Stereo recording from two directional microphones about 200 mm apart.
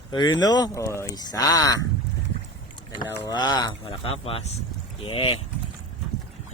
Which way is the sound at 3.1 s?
20° left (ahead or behind).